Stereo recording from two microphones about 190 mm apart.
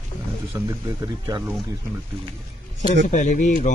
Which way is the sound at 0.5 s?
15° right (ahead or behind).